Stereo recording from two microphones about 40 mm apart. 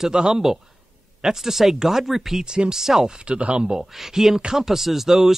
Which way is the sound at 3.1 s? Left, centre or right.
Right.